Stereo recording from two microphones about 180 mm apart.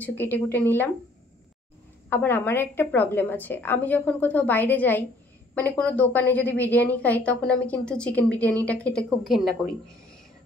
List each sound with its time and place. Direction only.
0.0 s a woman's voice: 10° left (ahead or behind)
2.0 s a woman's voice: 10° left (ahead or behind)